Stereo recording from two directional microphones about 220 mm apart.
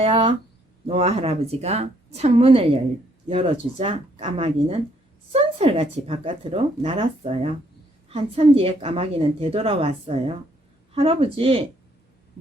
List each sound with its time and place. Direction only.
0.0 s a woman's voice: 25° right (ahead or behind)